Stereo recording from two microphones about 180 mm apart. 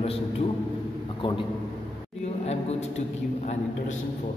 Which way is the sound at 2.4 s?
35° left (ahead or behind).